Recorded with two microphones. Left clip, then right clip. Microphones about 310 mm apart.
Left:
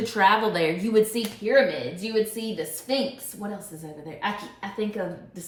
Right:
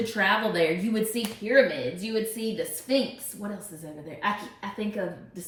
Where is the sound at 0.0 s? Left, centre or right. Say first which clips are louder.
Left 4 dB; centre.